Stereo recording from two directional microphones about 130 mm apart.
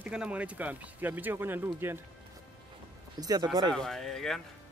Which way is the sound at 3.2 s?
30° right (ahead or behind).